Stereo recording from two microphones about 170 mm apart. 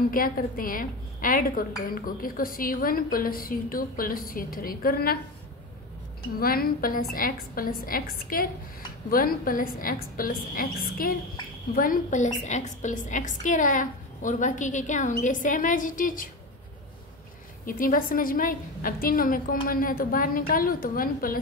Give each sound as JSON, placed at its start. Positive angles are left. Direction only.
{"t": 0.1, "sound": "a woman's voice", "side_deg": 55}
{"t": 6.4, "sound": "a woman's voice", "side_deg": 60}
{"t": 17.6, "sound": "a woman's voice", "side_deg": 55}